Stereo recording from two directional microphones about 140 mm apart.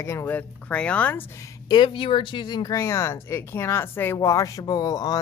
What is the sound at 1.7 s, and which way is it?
Speech, 35° left (ahead or behind).